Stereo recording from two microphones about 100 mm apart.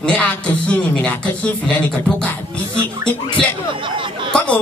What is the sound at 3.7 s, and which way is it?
Speech, 55° right (ahead or behind).